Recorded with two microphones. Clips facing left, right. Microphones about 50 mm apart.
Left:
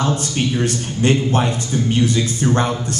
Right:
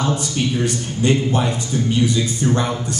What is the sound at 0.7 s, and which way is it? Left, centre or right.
A man's voice, left.